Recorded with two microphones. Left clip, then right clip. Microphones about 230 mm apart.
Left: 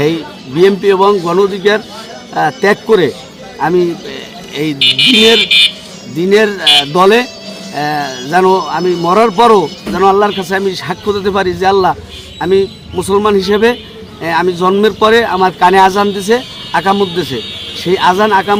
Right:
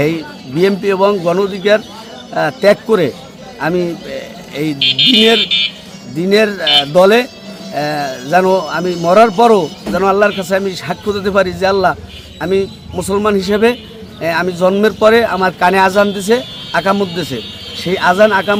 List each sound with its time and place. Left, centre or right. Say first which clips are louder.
0.0 s a man's voice: left 2 dB; centre
4.8 s speech: left 3 dB; left
6.2 s speech: left 3 dB; centre